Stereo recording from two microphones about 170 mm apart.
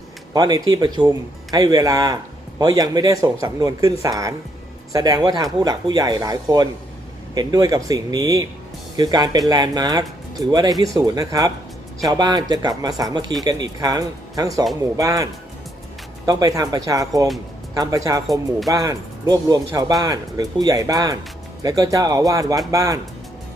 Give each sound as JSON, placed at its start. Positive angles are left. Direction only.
{"t": 0.3, "sound": "speech", "side_deg": -20}